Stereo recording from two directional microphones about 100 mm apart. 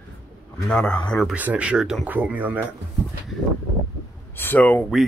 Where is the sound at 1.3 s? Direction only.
15° right (ahead or behind).